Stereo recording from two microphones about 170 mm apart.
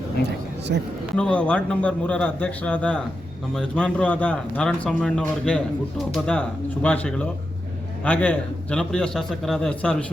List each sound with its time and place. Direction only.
0.7 s speech: 75° right (ahead or behind)
1.1 s a man's voice: 5° left (ahead or behind)